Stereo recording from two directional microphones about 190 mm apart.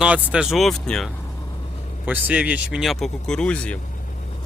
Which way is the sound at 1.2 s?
20° left (ahead or behind).